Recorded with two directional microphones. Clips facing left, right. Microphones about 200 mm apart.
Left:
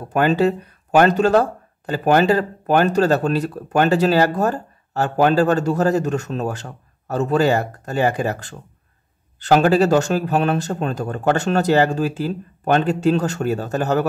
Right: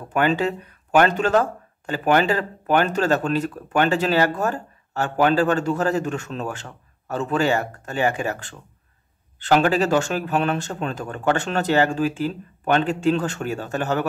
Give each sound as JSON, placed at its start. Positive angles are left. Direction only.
{"t": 0.1, "sound": "speech", "side_deg": 40}